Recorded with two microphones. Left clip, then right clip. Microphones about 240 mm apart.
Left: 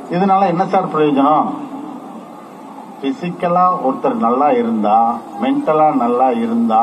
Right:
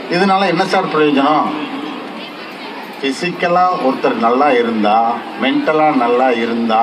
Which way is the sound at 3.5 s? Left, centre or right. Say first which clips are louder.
Even; right.